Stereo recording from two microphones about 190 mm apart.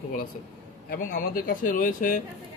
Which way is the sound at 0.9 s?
45° left (ahead or behind).